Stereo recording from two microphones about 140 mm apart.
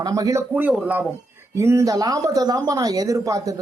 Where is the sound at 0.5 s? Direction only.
10° right (ahead or behind).